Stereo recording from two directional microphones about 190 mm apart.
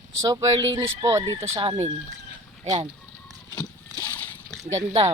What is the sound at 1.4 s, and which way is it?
Speech, 30° right (ahead or behind).